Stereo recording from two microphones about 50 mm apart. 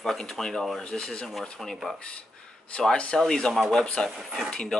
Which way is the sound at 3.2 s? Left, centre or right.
Centre.